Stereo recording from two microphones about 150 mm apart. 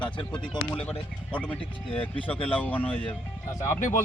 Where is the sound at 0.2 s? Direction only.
30° left (ahead or behind).